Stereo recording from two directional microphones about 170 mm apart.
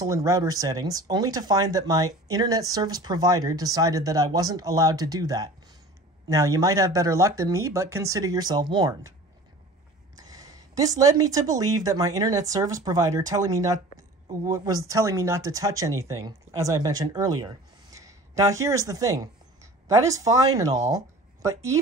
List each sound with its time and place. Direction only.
0.0 s speech: 20° right (ahead or behind)
10.1 s speech: 20° right (ahead or behind)